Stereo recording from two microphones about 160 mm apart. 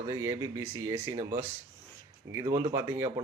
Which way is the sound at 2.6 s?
20° right (ahead or behind).